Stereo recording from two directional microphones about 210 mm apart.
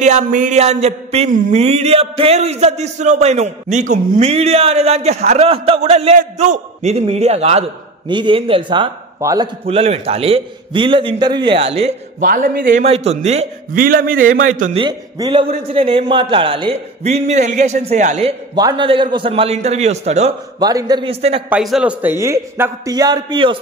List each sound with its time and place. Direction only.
0.0 s a sound: 35° right (ahead or behind)
8.1 s a man's voice: 25° right (ahead or behind)
9.7 s a man's voice: 30° right (ahead or behind)
12.3 s a sound: 40° right (ahead or behind)
12.7 s a sound: 30° right (ahead or behind)
14.8 s a man's voice: 20° right (ahead or behind)
18.5 s a man's voice: 20° right (ahead or behind)
20.5 s a man's voice: 20° right (ahead or behind)
21.5 s a man's voice: 5° right (ahead or behind); by 23.6 s 25° right (ahead or behind)